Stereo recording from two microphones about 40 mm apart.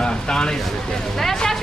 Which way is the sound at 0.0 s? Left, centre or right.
Centre.